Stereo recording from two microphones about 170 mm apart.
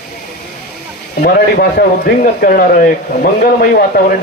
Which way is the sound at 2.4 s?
60° left (ahead or behind).